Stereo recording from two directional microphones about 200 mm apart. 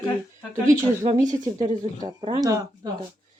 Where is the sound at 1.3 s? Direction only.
20° right (ahead or behind).